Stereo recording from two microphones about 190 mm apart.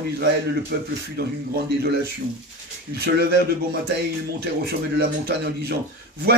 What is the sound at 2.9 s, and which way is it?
Speech, 55° right (ahead or behind).